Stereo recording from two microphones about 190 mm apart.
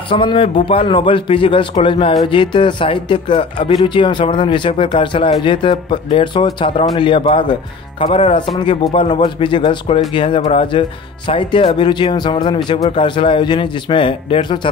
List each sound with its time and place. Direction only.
0.1 s speech: 25° left (ahead or behind)